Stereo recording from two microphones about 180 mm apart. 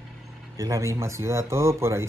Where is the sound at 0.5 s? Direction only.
15° right (ahead or behind).